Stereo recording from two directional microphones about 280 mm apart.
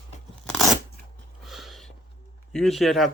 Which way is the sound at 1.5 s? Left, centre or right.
Centre.